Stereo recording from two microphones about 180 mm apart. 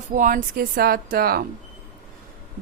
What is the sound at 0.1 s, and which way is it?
A woman's voice, 45° right (ahead or behind).